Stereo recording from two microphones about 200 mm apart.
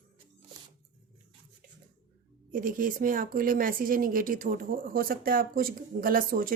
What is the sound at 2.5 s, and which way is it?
Speech, 45° right (ahead or behind).